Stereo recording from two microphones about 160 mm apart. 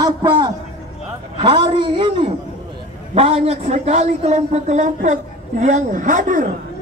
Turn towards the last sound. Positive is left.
turn(degrees=-55)  # may be behind; listen again after turning